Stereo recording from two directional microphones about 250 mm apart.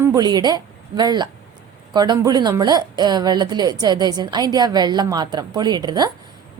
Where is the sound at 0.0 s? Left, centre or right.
Centre.